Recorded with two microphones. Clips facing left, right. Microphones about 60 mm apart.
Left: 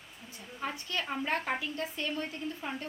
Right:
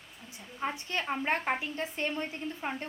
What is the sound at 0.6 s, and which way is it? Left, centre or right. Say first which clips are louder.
A woman's voice: right 2 dB; right.